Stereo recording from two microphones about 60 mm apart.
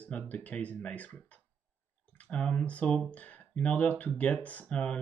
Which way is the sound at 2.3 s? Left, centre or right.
Centre.